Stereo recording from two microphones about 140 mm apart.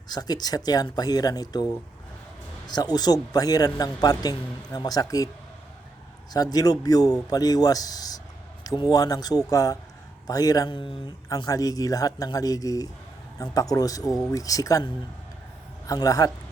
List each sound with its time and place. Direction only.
0.1 s speech: 30° left (ahead or behind)
6.3 s speech: 25° left (ahead or behind)
15.9 s speech: 25° left (ahead or behind)